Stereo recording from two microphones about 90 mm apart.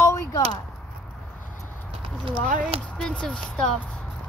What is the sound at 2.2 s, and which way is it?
Speech, 75° right (ahead or behind).